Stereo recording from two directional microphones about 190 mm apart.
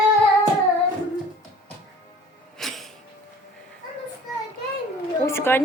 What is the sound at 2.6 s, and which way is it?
Music, centre (ahead or behind).